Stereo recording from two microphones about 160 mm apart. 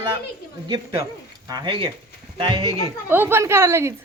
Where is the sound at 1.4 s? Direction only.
25° right (ahead or behind).